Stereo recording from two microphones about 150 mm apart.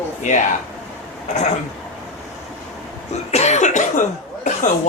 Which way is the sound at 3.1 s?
45° left (ahead or behind).